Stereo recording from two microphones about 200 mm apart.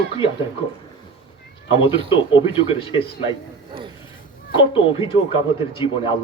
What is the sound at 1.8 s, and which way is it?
Music, 25° left (ahead or behind).